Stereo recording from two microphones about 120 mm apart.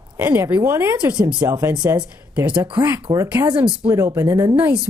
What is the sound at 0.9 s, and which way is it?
Speech, 10° right (ahead or behind).